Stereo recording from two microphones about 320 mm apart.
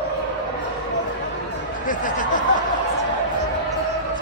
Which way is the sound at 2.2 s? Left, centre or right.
Left.